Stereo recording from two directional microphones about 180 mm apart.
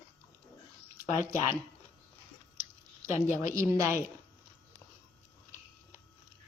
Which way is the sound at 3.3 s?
15° right (ahead or behind).